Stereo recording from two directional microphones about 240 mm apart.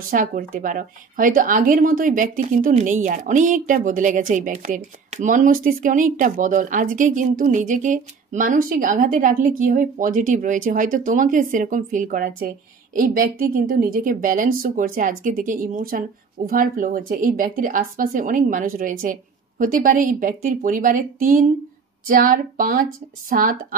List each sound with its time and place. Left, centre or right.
0.1 s a woman's voice: right